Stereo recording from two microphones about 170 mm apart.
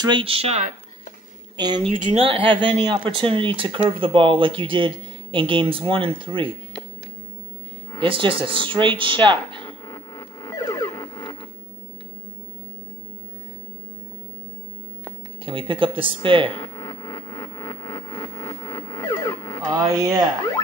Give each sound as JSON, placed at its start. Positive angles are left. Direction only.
{"t": 0.0, "sound": "speech", "side_deg": -30}
{"t": 8.0, "sound": "speech", "side_deg": -30}
{"t": 9.6, "sound": "music", "side_deg": 15}
{"t": 15.4, "sound": "speech", "side_deg": -30}
{"t": 16.5, "sound": "music", "side_deg": 15}
{"t": 19.7, "sound": "speech", "side_deg": -20}